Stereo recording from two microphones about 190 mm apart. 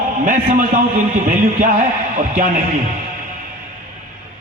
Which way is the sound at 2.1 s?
45° right (ahead or behind).